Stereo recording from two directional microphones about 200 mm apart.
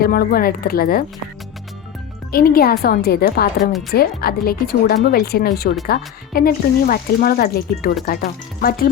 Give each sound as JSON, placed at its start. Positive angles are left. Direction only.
{"t": 0.0, "sound": "speech", "side_deg": 50}
{"t": 2.3, "sound": "speech", "side_deg": 45}
{"t": 3.6, "sound": "speech", "side_deg": 0}
{"t": 3.9, "sound": "speech", "side_deg": 50}